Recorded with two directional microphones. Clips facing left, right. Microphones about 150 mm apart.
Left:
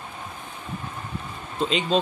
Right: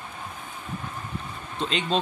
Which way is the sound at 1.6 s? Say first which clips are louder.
Left 3 dB; centre (ahead or behind).